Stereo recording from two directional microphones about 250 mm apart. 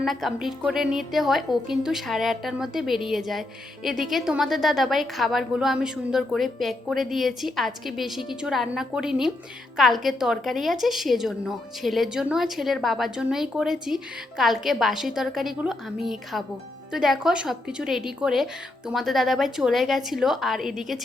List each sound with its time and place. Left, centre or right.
0.0 s a woman's voice: centre